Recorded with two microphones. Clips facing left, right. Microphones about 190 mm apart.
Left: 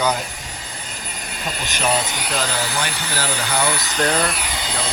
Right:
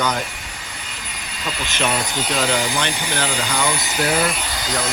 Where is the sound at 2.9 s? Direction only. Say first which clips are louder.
Right 2 dB; 15° right (ahead or behind).